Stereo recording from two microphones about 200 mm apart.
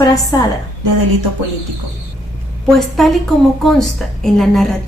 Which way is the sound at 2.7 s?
Centre (ahead or behind).